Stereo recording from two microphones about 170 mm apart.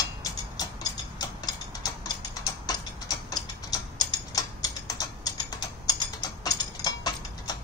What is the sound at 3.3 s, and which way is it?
Tick-tock, 20° left (ahead or behind).